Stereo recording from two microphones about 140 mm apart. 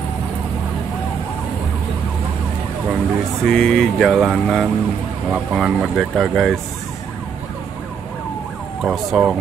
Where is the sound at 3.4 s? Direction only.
5° left (ahead or behind).